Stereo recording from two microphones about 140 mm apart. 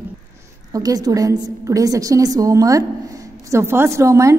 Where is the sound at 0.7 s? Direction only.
25° right (ahead or behind).